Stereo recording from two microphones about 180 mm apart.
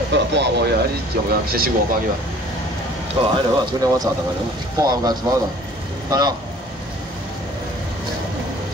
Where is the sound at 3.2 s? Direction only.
30° right (ahead or behind).